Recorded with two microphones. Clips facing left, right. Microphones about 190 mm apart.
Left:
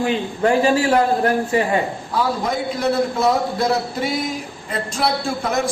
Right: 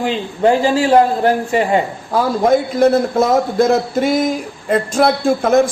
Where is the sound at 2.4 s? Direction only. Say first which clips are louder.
Right 9 dB; 50° right (ahead or behind).